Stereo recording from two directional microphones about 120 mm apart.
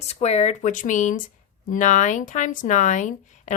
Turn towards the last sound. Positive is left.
turn(degrees=90)